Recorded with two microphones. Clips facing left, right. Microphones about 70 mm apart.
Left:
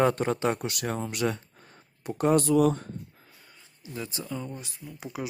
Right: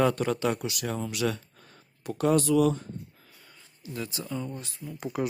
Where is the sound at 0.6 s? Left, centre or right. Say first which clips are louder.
Left 1 dB; left.